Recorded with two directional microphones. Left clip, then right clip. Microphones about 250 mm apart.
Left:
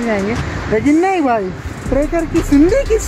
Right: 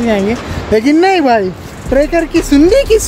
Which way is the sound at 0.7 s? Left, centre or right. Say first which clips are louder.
Right 4 dB; centre.